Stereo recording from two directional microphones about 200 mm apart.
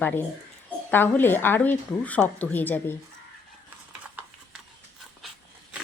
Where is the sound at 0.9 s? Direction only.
10° left (ahead or behind).